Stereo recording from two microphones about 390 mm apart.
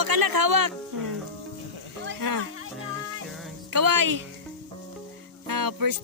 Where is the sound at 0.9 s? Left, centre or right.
Right.